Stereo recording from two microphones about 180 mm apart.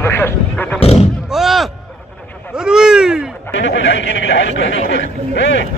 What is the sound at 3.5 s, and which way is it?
Speech, 85° left.